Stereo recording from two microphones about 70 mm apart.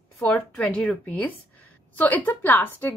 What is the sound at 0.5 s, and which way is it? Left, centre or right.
Speech, centre.